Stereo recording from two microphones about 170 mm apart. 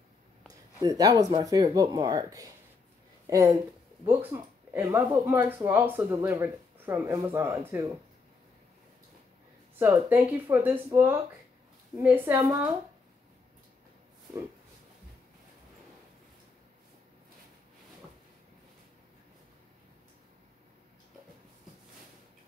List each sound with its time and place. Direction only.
0.8 s speech: 20° right (ahead or behind)
9.8 s speech: 15° right (ahead or behind)